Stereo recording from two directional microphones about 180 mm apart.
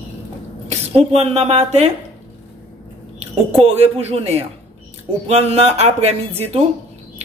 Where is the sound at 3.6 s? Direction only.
35° right (ahead or behind).